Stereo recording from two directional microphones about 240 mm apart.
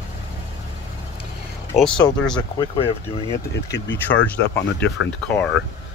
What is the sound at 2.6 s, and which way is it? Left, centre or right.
Speech, left.